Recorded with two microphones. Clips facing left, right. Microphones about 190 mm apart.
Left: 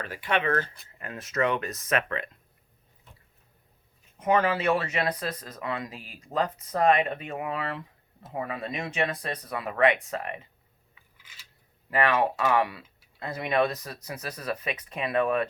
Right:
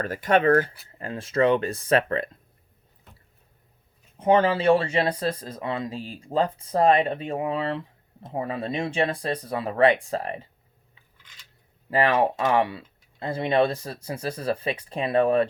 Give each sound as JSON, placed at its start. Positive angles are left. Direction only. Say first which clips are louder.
{"t": 0.0, "sound": "speech", "louder": "right 7 dB", "side_deg": -45}
{"t": 0.6, "sound": "speech", "louder": "right 5 dB", "side_deg": -5}
{"t": 0.9, "sound": "speech", "louder": "right 5 dB", "side_deg": -30}
{"t": 4.2, "sound": "speech", "louder": "right 4 dB", "side_deg": -30}
{"t": 11.2, "sound": "a sound", "louder": "even", "side_deg": 5}
{"t": 11.9, "sound": "speech", "louder": "right 3 dB", "side_deg": -30}